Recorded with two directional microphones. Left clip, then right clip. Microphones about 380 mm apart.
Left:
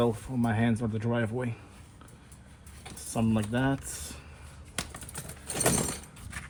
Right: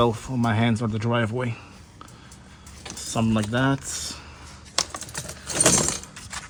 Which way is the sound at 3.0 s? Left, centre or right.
Right.